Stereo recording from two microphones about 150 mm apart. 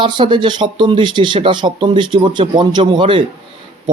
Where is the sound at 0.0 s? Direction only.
30° right (ahead or behind).